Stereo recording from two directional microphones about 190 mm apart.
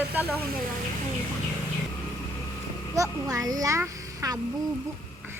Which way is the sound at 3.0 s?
20° right (ahead or behind).